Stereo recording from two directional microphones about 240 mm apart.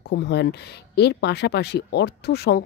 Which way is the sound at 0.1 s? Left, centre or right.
Left.